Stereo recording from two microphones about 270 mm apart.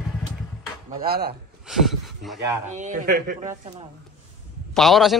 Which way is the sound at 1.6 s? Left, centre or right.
Centre.